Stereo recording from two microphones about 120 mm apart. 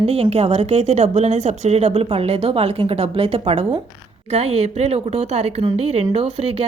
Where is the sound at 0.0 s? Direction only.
60° right (ahead or behind).